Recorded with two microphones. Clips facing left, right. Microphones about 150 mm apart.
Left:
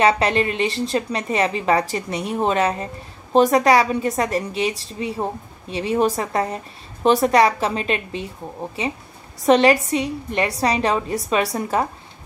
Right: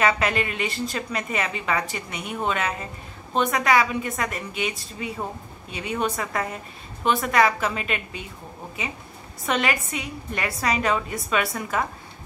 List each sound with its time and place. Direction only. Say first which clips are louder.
0.0 s a woman's voice: left 5 dB; 30° left (ahead or behind)
9.5 s a woman's voice: left 10 dB; 35° left (ahead or behind)